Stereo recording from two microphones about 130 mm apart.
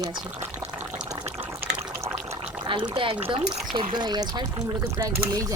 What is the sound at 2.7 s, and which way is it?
Speech, 40° right (ahead or behind).